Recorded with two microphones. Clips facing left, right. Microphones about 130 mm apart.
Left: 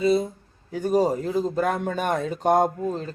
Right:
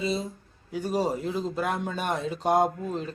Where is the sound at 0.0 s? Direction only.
50° left (ahead or behind).